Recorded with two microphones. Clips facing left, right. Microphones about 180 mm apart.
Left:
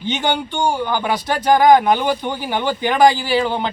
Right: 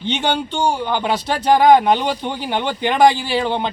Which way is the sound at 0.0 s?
25° right (ahead or behind).